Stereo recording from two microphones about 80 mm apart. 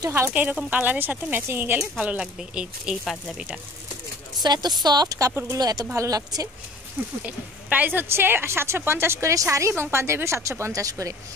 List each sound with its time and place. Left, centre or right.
0.3 s speech: centre
4.4 s a woman's voice: right
7.2 s speech: right